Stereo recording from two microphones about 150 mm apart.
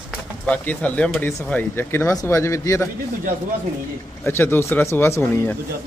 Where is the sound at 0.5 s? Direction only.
10° left (ahead or behind).